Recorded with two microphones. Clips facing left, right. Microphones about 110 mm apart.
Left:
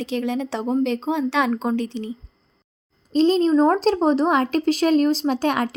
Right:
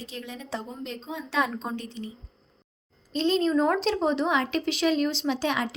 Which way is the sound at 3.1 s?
35° left (ahead or behind).